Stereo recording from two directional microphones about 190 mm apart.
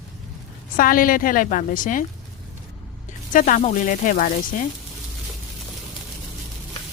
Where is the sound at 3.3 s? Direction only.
45° left (ahead or behind).